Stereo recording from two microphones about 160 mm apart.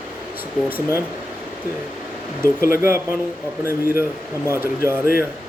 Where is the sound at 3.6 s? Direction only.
15° right (ahead or behind).